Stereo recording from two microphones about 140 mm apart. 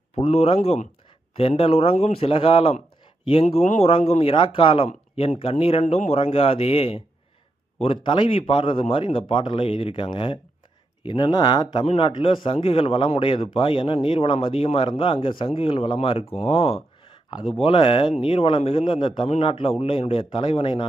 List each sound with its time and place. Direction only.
0.2 s a man's voice: 45° left (ahead or behind)
16.5 s a sound: 45° left (ahead or behind)
17.6 s a man's voice: 35° left (ahead or behind)